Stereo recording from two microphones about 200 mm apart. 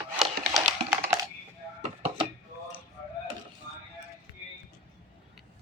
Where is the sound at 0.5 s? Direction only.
20° right (ahead or behind).